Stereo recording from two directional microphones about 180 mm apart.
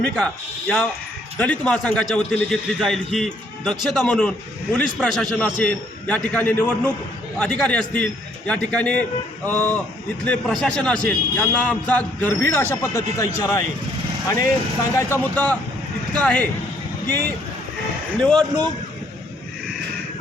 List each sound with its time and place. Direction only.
1.4 s a man's voice: 5° left (ahead or behind)
18.2 s a man's voice: 5° left (ahead or behind)